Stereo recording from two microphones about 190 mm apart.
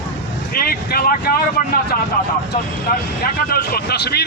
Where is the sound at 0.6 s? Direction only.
50° left (ahead or behind).